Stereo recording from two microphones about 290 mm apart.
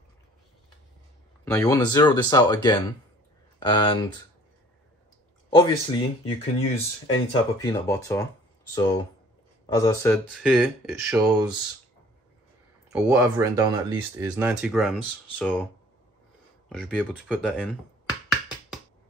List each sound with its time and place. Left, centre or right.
1.4 s speech: centre
5.5 s speech: centre
10.1 s speech: centre
11.2 s speech: centre
12.9 s speech: centre